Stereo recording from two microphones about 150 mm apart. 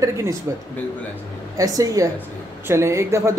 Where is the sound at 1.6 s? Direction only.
25° right (ahead or behind).